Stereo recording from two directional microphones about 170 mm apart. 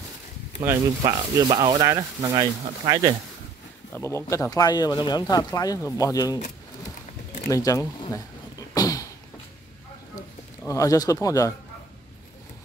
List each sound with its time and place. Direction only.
0.6 s speech: 20° right (ahead or behind)
3.9 s speech: 15° left (ahead or behind)
7.4 s speech: 20° left (ahead or behind)
8.1 s a sound: 20° left (ahead or behind)
10.7 s speech: 20° left (ahead or behind)